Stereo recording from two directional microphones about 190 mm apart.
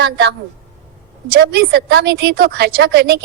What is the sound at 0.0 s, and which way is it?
A woman's voice, 60° right (ahead or behind).